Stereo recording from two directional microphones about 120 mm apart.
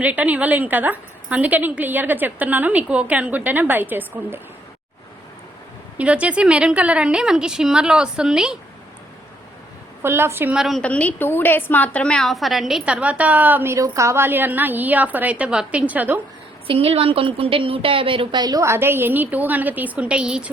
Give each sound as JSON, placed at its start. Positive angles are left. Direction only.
{"t": 0.0, "sound": "a woman's voice", "side_deg": -15}
{"t": 6.0, "sound": "a woman's voice", "side_deg": -10}
{"t": 10.0, "sound": "a woman's voice", "side_deg": -20}
{"t": 10.5, "sound": "a woman's voice", "side_deg": 0}
{"t": 10.8, "sound": "a woman's voice", "side_deg": 10}
{"t": 16.6, "sound": "a woman's voice", "side_deg": -55}